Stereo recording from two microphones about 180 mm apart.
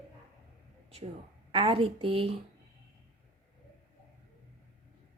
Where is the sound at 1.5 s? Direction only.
30° right (ahead or behind).